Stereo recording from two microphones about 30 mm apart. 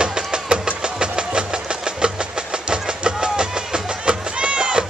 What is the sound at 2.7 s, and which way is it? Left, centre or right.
Music, right.